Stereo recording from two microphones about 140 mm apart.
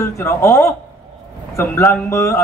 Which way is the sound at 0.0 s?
20° left (ahead or behind).